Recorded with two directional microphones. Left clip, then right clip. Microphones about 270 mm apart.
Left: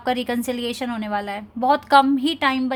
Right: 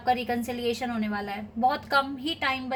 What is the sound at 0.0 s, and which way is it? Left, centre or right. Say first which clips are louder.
A woman's voice: left 3 dB; left.